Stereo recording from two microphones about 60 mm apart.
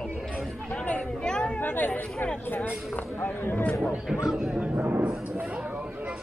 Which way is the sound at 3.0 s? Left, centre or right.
Left.